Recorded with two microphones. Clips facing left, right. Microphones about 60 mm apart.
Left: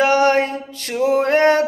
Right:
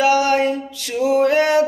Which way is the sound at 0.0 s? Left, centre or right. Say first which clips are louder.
Left 1 dB; left.